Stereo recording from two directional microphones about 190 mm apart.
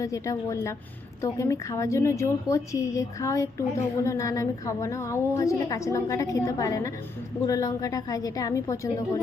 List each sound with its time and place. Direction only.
0.0 s a woman's voice: 15° left (ahead or behind)